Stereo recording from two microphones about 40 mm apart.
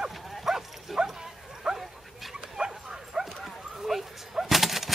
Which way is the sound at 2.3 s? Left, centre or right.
Centre.